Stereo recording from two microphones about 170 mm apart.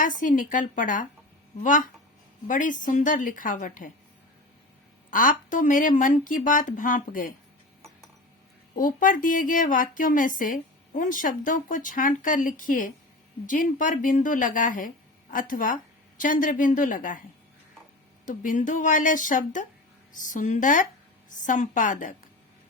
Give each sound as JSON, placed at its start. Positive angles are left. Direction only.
{"t": 0.0, "sound": "speech", "side_deg": 50}
{"t": 2.5, "sound": "speech", "side_deg": 50}
{"t": 5.1, "sound": "speech", "side_deg": 50}
{"t": 8.7, "sound": "speech", "side_deg": 55}
{"t": 18.3, "sound": "speech", "side_deg": 50}